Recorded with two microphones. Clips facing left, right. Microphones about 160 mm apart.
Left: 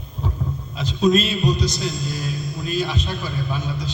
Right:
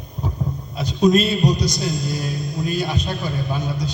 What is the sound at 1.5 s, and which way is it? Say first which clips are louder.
A man's voice: right 1 dB; 15° right (ahead or behind).